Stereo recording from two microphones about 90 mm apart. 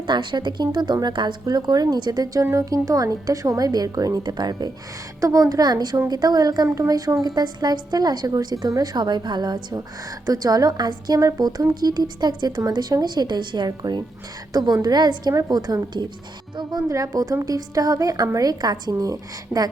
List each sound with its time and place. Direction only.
0.1 s a woman's voice: 60° right (ahead or behind); by 19.6 s 45° right (ahead or behind)